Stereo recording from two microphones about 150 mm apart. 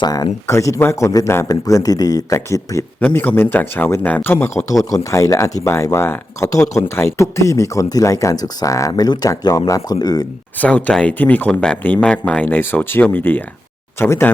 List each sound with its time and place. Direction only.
0.0 s speech: 25° left (ahead or behind)
10.6 s speech: 10° left (ahead or behind)